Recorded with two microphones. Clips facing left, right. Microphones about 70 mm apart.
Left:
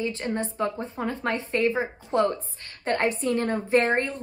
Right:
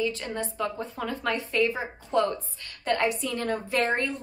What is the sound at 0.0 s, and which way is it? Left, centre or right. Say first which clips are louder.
A woman's voice: left 1 dB; left.